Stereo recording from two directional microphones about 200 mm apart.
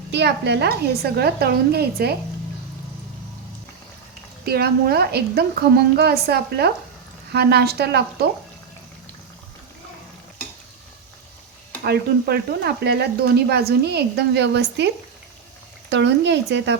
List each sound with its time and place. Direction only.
0.1 s a woman's voice: 60° right (ahead or behind)
4.4 s a woman's voice: 50° right (ahead or behind)
11.8 s speech: 50° right (ahead or behind)
15.9 s speech: 60° right (ahead or behind)